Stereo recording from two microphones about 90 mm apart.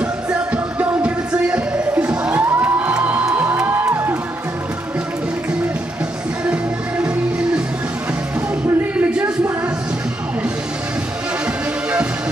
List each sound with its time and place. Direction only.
0.0 s music: 15° right (ahead or behind)
6.4 s music: 10° right (ahead or behind)
9.0 s a sound: 15° right (ahead or behind)